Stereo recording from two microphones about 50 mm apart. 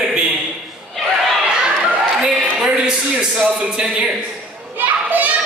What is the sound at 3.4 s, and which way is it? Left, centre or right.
Speech, right.